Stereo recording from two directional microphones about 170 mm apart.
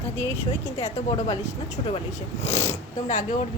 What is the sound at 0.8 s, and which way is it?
Speech, 35° left (ahead or behind).